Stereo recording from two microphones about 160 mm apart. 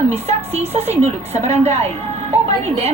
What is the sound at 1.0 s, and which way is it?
Speech, 45° right (ahead or behind).